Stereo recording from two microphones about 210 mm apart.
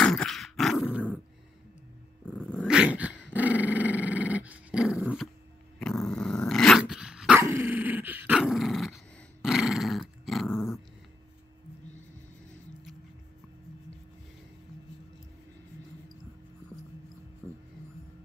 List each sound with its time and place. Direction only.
0.0 s dog: 5° left (ahead or behind)
2.6 s dog: 5° right (ahead or behind)
17.4 s music: 5° left (ahead or behind)